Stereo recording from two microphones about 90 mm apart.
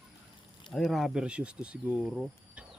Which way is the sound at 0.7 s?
Centre (ahead or behind).